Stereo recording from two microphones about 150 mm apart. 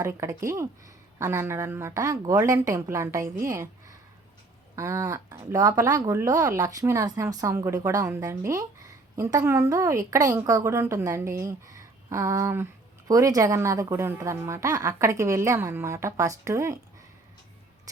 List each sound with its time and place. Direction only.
0.0 s speech: 20° right (ahead or behind)
17.9 s music: 20° right (ahead or behind)